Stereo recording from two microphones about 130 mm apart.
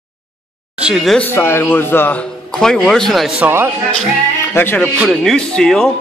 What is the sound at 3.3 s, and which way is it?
Speech, 15° right (ahead or behind).